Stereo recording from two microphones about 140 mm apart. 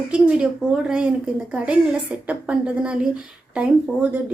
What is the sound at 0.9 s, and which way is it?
Speech, 5° right (ahead or behind).